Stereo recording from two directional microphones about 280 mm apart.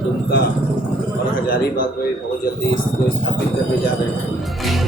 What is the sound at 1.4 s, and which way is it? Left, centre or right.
Speech, left.